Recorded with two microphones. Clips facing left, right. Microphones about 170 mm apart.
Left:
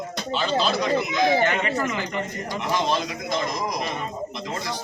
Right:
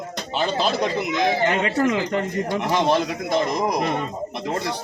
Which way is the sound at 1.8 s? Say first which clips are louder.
Right 6 dB; 70° right (ahead or behind).